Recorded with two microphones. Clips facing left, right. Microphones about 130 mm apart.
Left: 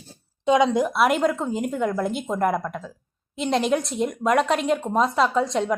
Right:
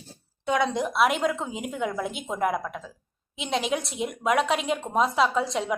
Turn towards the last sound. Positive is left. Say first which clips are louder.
# left 3 dB
turn(degrees=0)  # may be behind; listen again after turning